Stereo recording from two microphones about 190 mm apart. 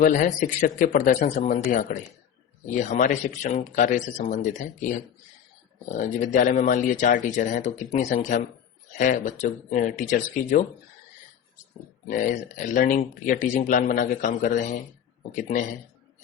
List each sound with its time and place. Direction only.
0.0 s speech: 45° left (ahead or behind)
5.9 s speech: 40° left (ahead or behind)
12.0 s speech: 45° left (ahead or behind)